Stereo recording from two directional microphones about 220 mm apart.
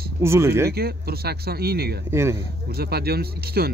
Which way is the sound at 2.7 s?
45° right (ahead or behind).